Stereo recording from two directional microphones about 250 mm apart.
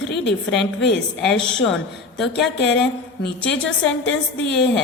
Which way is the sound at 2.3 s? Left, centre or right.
Left.